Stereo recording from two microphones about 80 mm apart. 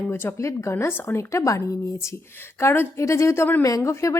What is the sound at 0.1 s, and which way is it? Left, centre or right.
A woman's voice, left.